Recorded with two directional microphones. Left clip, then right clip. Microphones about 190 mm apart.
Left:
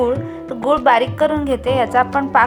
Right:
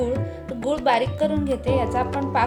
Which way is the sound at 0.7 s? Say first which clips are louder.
Left 7 dB; 5° right (ahead or behind).